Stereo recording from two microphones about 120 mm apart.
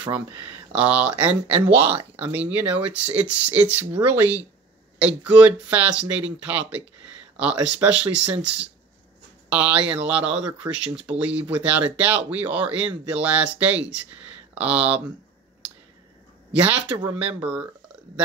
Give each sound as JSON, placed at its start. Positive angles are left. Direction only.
{"t": 0.0, "sound": "speech", "side_deg": -15}
{"t": 7.8, "sound": "speech", "side_deg": -10}
{"t": 16.5, "sound": "speech", "side_deg": -10}